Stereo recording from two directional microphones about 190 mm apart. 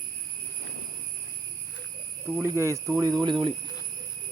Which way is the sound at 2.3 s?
15° right (ahead or behind).